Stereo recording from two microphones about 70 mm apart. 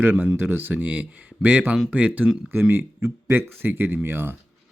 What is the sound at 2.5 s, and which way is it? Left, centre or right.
Speech, right.